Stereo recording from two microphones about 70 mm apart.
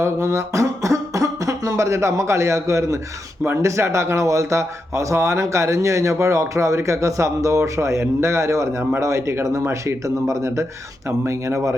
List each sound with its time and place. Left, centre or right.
0.0 s speech: right